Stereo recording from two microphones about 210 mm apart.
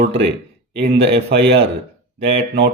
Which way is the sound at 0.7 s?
30° right (ahead or behind).